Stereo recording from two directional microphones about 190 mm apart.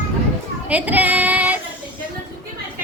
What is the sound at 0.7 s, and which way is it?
Child singing, 10° right (ahead or behind).